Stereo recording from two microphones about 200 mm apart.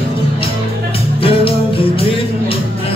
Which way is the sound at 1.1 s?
30° left (ahead or behind).